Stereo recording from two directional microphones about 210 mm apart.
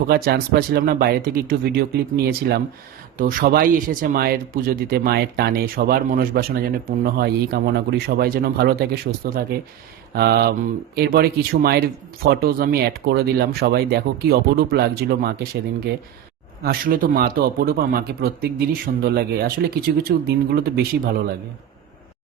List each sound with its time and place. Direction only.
0.1 s speech: 50° right (ahead or behind)
16.6 s speech: 45° right (ahead or behind)